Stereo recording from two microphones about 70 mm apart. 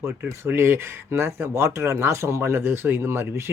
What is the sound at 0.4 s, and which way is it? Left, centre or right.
Speech, right.